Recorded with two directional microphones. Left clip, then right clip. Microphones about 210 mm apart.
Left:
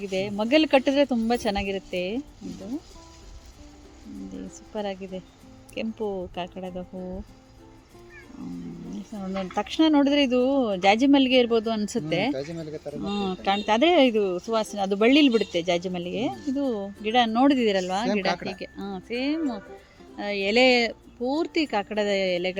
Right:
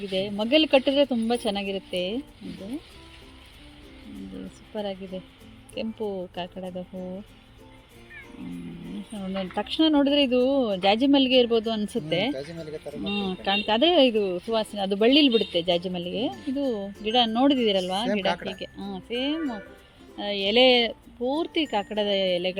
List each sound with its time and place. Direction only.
0.1 s speech: centre (ahead or behind)
4.7 s speech: centre (ahead or behind)
9.4 s speech: centre (ahead or behind)
12.3 s speech: 45° left (ahead or behind)
13.1 s speech: 5° right (ahead or behind)